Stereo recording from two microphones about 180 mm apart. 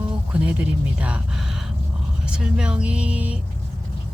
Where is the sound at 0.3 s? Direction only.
5° right (ahead or behind).